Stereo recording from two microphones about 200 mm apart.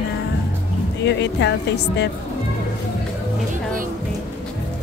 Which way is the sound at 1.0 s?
60° left (ahead or behind).